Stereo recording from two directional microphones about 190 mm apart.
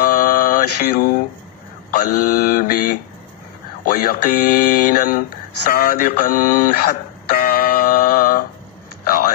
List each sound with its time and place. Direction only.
0.0 s mantra: 55° left (ahead or behind)
2.0 s speech: 55° left (ahead or behind)
3.8 s speech: 55° left (ahead or behind)
5.7 s music: 50° left (ahead or behind)